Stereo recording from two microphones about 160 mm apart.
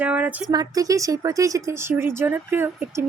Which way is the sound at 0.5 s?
20° right (ahead or behind).